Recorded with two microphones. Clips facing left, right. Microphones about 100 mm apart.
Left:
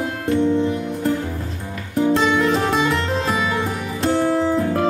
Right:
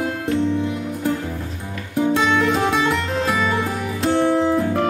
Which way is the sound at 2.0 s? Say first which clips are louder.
Left 1 dB; centre (ahead or behind).